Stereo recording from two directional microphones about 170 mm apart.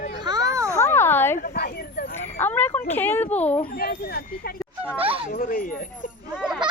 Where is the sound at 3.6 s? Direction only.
60° left (ahead or behind).